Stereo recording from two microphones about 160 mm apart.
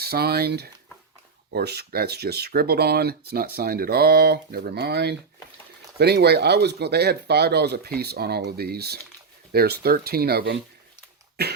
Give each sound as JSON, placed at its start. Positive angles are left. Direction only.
{"t": 0.0, "sound": "speech", "side_deg": -75}
{"t": 11.4, "sound": "cough", "side_deg": -90}